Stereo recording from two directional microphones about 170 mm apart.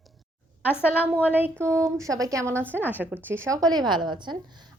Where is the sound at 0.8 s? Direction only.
10° right (ahead or behind).